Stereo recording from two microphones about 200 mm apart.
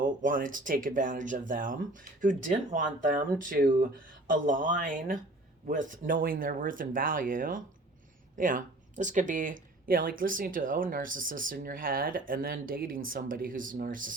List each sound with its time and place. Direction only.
0.0 s speech: 45° right (ahead or behind)